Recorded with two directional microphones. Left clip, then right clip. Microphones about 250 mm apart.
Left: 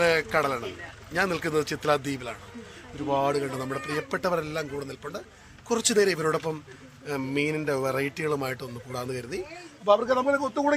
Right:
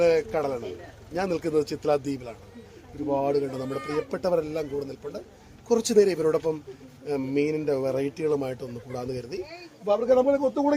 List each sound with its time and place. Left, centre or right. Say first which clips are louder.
0.0 s speech: right 1 dB; centre
10.4 s speech: right 3 dB; centre